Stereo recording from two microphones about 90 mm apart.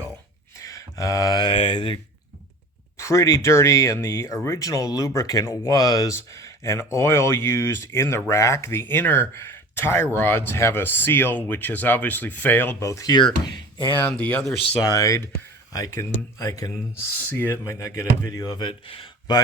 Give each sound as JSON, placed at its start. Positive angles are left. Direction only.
{"t": 0.6, "sound": "mantra", "side_deg": 35}
{"t": 1.5, "sound": "speech", "side_deg": 75}
{"t": 3.0, "sound": "speech", "side_deg": 35}
{"t": 12.8, "sound": "speech", "side_deg": 35}
{"t": 13.1, "sound": "speech", "side_deg": 55}
{"t": 13.9, "sound": "speech", "side_deg": 20}
{"t": 14.8, "sound": "speech", "side_deg": 40}
{"t": 18.3, "sound": "speech", "side_deg": 55}
{"t": 18.7, "sound": "speech", "side_deg": 90}